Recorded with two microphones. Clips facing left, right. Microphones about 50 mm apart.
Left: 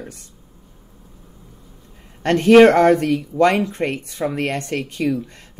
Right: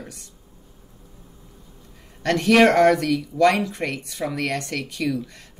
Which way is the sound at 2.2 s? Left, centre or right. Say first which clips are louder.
Left 6 dB; left.